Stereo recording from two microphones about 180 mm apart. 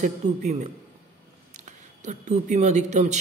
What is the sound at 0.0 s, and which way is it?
Speech, 40° right (ahead or behind).